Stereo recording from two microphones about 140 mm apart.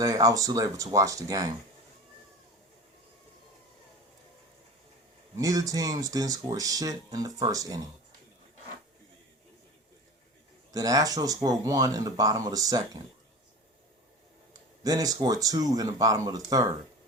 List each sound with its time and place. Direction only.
0.0 s speech: 25° right (ahead or behind)
5.4 s speech: 25° right (ahead or behind)
10.7 s speech: 25° right (ahead or behind)
14.8 s speech: 25° right (ahead or behind)